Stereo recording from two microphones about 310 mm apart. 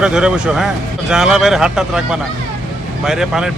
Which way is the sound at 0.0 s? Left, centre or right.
Centre.